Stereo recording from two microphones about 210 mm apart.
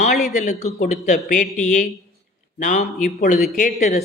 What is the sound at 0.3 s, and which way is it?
Speech, 35° left (ahead or behind).